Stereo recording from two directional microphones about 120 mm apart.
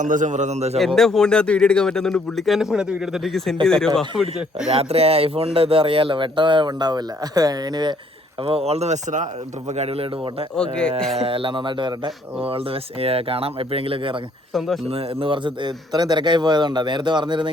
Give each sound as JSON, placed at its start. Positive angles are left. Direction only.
{"t": 0.0, "sound": "a man's voice", "side_deg": -90}
{"t": 0.9, "sound": "speech", "side_deg": 5}
{"t": 4.7, "sound": "speech", "side_deg": -55}
{"t": 8.4, "sound": "speech", "side_deg": -55}
{"t": 10.5, "sound": "speech", "side_deg": 5}
{"t": 11.2, "sound": "a man's voice", "side_deg": -50}